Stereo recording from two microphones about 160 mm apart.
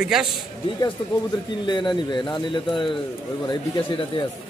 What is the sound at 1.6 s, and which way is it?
Speech, 30° left (ahead or behind).